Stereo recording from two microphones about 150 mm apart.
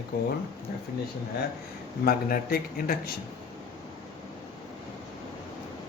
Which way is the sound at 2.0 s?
75° left (ahead or behind).